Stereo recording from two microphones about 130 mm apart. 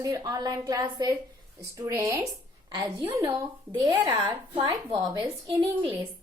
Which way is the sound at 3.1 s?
25° right (ahead or behind).